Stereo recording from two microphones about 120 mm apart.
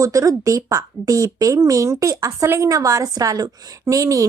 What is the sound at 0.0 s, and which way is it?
Speech, 30° right (ahead or behind).